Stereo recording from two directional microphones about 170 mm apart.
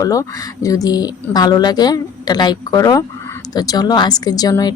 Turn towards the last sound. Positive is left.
turn(degrees=20)  # may be behind; listen again after turning